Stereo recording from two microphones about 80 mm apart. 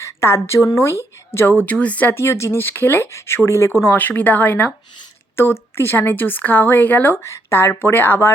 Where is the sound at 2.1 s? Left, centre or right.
Left.